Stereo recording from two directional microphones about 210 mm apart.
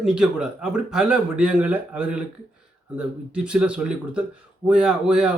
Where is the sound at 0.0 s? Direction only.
5° right (ahead or behind).